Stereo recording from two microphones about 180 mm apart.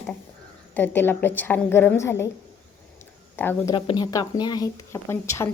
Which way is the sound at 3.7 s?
25° left (ahead or behind).